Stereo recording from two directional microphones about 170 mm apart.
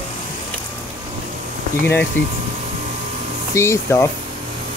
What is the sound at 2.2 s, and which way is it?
Speech, 15° left (ahead or behind).